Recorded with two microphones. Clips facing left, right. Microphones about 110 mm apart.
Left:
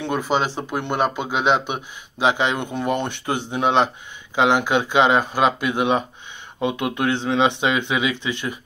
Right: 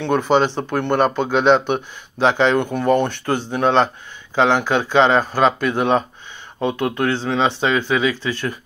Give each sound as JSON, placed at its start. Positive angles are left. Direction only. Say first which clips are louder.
{"t": 0.0, "sound": "speech", "louder": "right 5 dB", "side_deg": 5}